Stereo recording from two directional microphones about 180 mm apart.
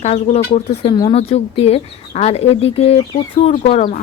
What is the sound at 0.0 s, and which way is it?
Speech, 35° left (ahead or behind).